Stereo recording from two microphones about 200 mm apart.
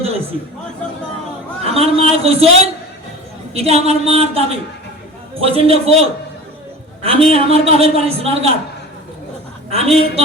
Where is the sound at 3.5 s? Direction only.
30° right (ahead or behind).